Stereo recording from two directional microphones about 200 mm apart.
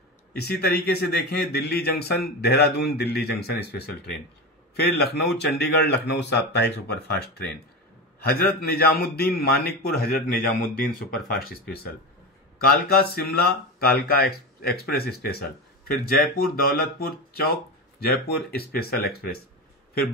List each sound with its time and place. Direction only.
0.3 s a man's voice: 55° left (ahead or behind)
8.6 s a man's voice: 50° left (ahead or behind)